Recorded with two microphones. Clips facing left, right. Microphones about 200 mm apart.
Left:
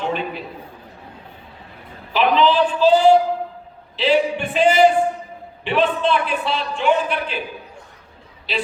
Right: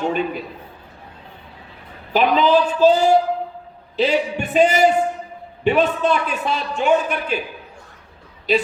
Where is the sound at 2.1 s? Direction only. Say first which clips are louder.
Right 1 dB; 45° right (ahead or behind).